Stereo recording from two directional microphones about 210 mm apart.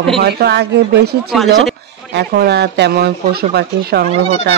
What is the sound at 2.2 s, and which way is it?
Speech, 50° right (ahead or behind).